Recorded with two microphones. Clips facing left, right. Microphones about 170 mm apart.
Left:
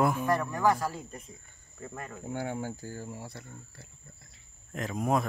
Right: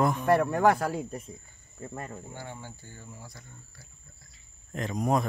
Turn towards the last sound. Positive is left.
turn(degrees=0)  # may be behind; listen again after turning